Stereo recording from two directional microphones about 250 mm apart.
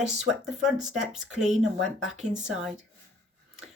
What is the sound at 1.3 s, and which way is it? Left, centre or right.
Speech, right.